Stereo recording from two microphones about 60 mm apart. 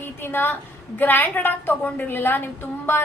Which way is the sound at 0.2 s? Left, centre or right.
Left.